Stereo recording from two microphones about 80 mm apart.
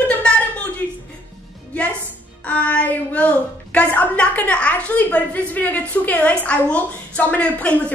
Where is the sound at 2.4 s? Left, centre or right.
Centre.